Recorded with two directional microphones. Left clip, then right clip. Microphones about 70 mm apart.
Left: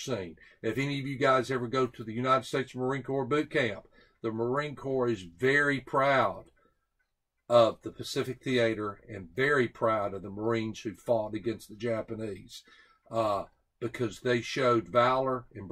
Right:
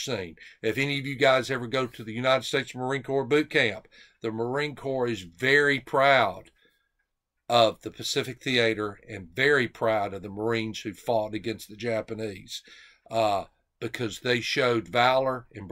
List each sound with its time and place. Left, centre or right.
0.0 s speech: right
7.4 s speech: right